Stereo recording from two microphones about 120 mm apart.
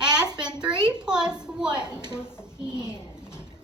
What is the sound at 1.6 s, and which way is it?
Speech, 35° right (ahead or behind).